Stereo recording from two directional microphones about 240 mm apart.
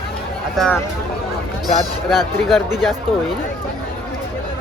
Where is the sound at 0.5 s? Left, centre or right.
Centre.